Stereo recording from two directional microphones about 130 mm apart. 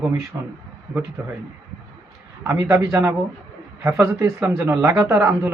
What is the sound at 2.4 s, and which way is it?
A man's voice, 20° right (ahead or behind).